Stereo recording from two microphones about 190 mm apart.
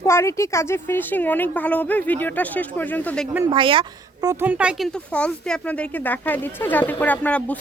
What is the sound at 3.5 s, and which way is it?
Speech, 25° right (ahead or behind).